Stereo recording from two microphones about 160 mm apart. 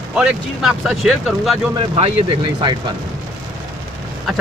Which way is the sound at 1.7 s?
40° right (ahead or behind).